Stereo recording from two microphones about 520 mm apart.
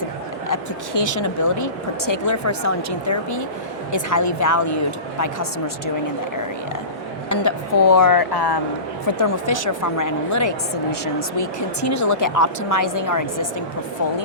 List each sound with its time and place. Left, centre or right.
0.0 s speech: left
7.3 s speech: left
9.0 s speech: left